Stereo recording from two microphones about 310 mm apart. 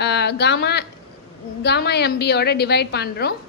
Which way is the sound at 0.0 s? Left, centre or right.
Left.